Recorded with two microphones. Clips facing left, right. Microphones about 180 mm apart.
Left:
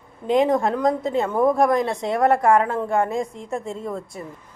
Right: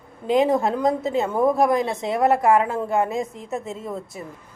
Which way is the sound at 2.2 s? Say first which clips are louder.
Even; 20° right (ahead or behind).